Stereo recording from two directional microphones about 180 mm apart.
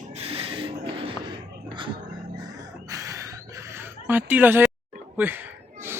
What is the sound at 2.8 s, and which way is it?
Gasp, 20° right (ahead or behind).